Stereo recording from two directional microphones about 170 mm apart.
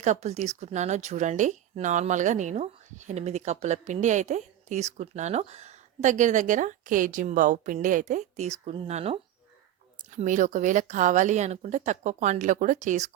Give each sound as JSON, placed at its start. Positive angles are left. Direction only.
{"t": 0.0, "sound": "speech", "side_deg": -45}
{"t": 10.2, "sound": "speech", "side_deg": -45}